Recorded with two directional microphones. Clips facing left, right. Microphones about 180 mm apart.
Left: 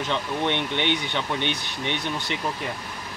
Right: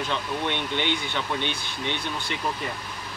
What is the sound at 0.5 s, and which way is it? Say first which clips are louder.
Speech: left 3 dB; 20° left (ahead or behind).